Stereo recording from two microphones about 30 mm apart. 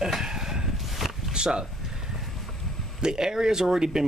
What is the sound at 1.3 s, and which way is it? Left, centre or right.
Speech, right.